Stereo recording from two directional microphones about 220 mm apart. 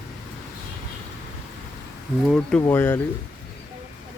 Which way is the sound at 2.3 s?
5° left (ahead or behind).